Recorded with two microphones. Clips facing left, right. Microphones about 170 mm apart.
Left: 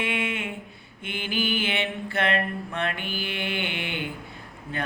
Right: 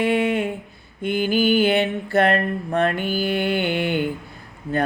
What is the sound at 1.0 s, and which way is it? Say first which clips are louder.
Mantra: right 10 dB; 40° right (ahead or behind).